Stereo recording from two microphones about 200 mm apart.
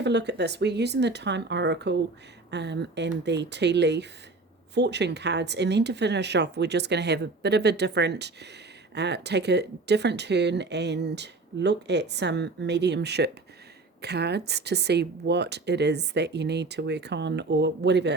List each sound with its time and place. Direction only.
0.0 s speech: 60° right (ahead or behind)